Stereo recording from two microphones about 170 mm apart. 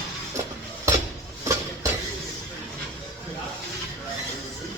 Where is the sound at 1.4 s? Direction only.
15° right (ahead or behind).